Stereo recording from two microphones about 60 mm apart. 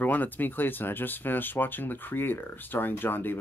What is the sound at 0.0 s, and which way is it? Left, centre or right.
Speech, left.